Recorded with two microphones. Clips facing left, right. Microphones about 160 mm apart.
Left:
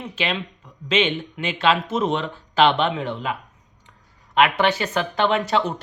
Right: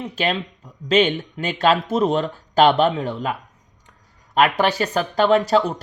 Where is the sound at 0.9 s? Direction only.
40° right (ahead or behind).